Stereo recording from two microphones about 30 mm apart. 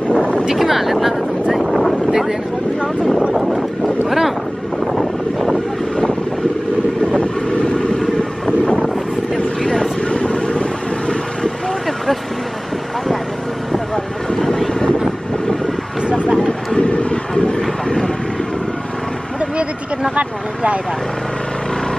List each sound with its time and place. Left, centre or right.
0.1 s boat: left
0.6 s speech: centre
1.5 s boat: centre
2.0 s boat: centre
4.9 s vehicle: centre
7.4 s vehicle: left
8.2 s wind noise: left
8.8 s vehicle: centre
10.0 s vehicle: left
14.3 s vehicle: left
16.7 s vehicle: left
17.3 s vehicle: left
19.5 s a sound: right